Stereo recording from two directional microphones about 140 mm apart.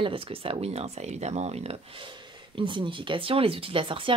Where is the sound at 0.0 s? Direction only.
40° right (ahead or behind).